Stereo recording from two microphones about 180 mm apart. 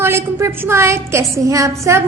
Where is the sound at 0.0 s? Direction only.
15° right (ahead or behind).